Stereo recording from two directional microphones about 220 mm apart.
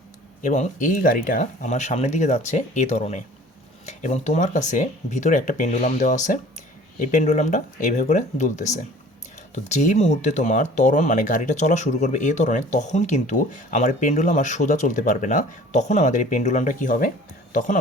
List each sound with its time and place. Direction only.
0.4 s speech: 35° left (ahead or behind)
9.6 s speech: 35° left (ahead or behind)